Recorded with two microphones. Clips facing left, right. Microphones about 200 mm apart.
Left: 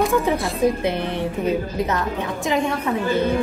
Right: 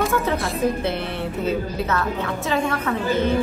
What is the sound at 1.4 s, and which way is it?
Speech, 15° left (ahead or behind).